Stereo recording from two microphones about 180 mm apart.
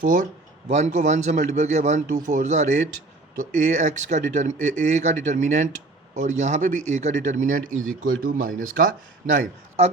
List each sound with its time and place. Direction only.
0.0 s a man's voice: 45° right (ahead or behind)